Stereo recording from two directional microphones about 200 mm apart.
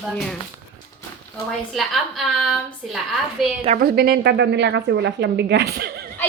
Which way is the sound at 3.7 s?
50° right (ahead or behind).